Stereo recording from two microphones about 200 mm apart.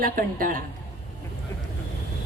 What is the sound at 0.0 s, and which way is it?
Speech, 45° right (ahead or behind).